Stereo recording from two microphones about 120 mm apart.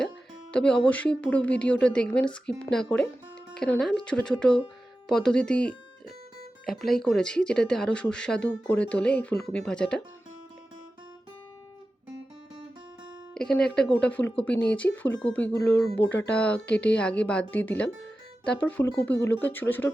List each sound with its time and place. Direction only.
0.5 s speech: 10° left (ahead or behind)
13.3 s speech: 5° left (ahead or behind)